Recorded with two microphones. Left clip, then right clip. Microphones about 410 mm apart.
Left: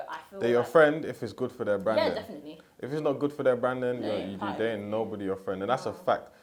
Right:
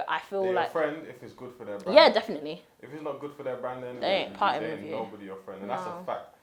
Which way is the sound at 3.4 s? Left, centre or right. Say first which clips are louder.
Left 9 dB; left.